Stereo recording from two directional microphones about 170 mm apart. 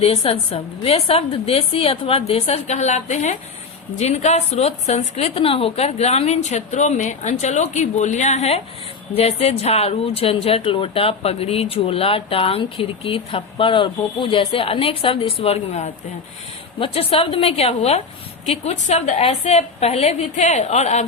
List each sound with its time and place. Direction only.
0.0 s speech: 35° left (ahead or behind)